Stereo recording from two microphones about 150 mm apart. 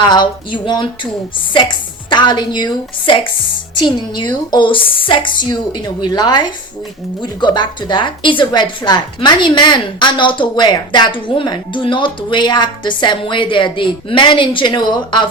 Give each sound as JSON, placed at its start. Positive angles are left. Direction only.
{"t": 0.0, "sound": "a woman's voice", "side_deg": 30}